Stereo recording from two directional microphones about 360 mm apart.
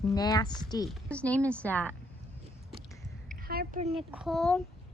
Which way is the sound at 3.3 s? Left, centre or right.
Right.